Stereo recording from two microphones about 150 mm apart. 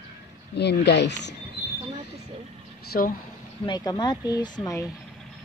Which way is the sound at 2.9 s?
70° left (ahead or behind).